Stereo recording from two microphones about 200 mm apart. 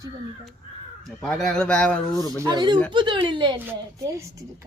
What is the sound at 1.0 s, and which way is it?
Speech, 5° left (ahead or behind).